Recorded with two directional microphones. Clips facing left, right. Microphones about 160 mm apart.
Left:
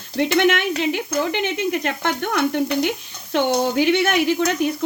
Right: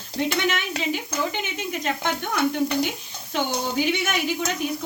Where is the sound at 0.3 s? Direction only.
65° left (ahead or behind).